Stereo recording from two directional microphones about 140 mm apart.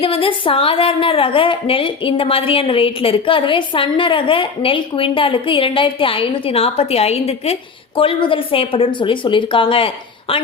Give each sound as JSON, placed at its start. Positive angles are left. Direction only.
{"t": 0.0, "sound": "a woman's voice", "side_deg": 40}